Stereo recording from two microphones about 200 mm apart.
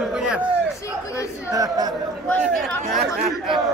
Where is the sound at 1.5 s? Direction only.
20° right (ahead or behind).